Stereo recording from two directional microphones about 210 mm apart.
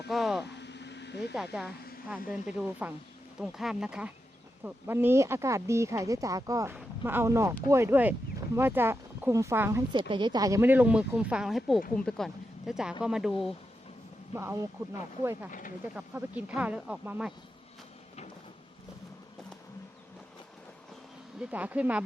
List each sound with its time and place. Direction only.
0.1 s vehicle: centre (ahead or behind)
0.4 s vehicle: 55° left (ahead or behind)
2.3 s speech: 5° right (ahead or behind)
14.3 s speech: 15° right (ahead or behind)
21.5 s speech: 5° right (ahead or behind)